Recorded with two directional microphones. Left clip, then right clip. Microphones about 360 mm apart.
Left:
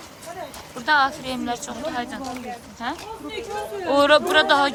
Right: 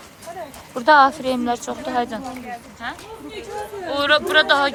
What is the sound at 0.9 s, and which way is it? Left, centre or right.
Speech, centre.